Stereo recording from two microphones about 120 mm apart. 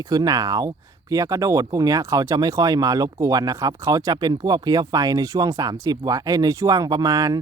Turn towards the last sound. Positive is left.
turn(degrees=-30)  # may be behind; listen again after turning